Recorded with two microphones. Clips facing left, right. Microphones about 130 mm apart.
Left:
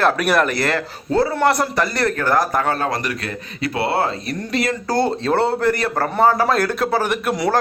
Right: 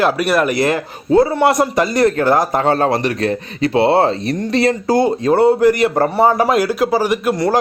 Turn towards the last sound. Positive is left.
turn(degrees=-10)  # may be behind; listen again after turning